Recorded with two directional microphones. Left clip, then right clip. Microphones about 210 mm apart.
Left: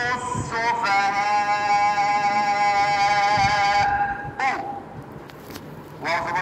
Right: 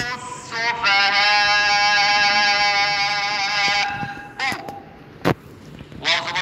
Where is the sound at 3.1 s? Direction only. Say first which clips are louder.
Left 3 dB; 20° left (ahead or behind).